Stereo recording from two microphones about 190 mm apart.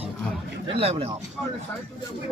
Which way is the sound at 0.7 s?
30° right (ahead or behind).